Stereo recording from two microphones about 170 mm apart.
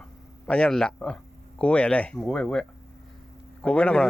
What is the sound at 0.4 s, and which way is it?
Speech, 5° left (ahead or behind).